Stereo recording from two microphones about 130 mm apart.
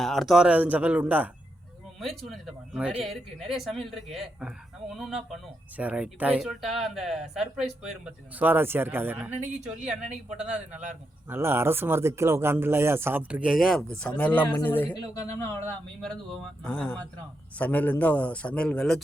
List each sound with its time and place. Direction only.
0.0 s speech: centre (ahead or behind)
2.0 s speech: centre (ahead or behind); by 9.1 s 15° right (ahead or behind)
9.8 s speech: 5° right (ahead or behind)
11.3 s a man's voice: 20° right (ahead or behind); by 15.7 s 15° left (ahead or behind)
16.0 s a man's voice: 5° left (ahead or behind)